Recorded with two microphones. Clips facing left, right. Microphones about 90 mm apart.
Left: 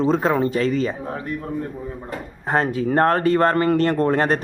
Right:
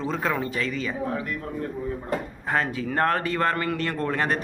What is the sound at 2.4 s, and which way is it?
Speech, 35° left (ahead or behind).